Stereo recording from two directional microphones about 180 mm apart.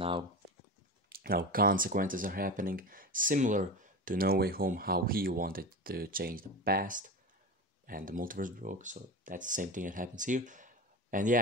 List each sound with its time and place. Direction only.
1.1 s speech: 55° right (ahead or behind)